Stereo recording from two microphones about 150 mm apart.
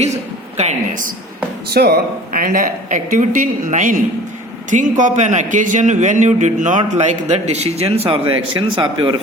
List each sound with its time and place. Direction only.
0.5 s a man's voice: 50° right (ahead or behind)
1.7 s a man's voice: 90° right; by 9.1 s 35° right (ahead or behind)